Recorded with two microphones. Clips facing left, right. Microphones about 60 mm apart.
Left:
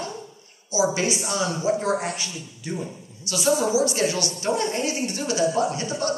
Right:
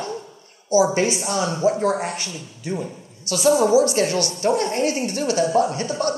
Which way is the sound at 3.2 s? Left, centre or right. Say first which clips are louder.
Right 5 dB; right.